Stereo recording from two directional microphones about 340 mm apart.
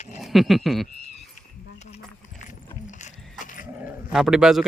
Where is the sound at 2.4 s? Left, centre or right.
Left.